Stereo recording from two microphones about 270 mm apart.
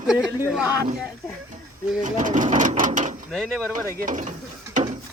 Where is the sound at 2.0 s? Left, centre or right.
Right.